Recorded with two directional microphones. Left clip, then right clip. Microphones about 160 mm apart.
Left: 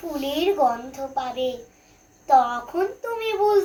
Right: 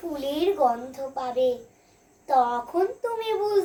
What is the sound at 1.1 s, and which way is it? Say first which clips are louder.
Speech: right 1 dB; 35° right (ahead or behind).